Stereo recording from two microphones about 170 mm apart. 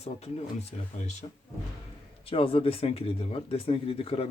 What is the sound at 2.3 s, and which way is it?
Speech, 35° left (ahead or behind).